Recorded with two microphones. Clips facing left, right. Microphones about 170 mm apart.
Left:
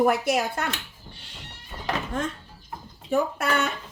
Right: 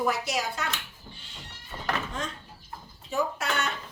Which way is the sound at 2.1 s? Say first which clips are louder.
Left 6 dB; 55° left (ahead or behind).